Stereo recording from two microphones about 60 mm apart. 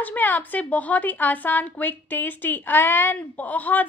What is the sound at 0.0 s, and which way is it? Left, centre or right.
Speech, left.